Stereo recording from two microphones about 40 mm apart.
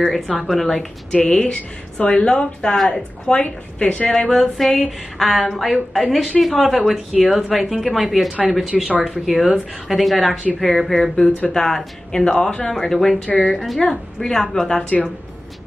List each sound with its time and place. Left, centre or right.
0.4 s a woman's voice: centre; by 4.1 s left
4.1 s a woman's voice: centre